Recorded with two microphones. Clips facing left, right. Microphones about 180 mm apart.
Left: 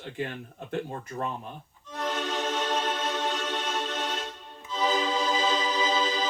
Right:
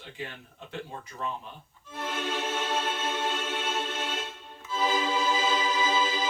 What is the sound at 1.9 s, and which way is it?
Music, 10° right (ahead or behind).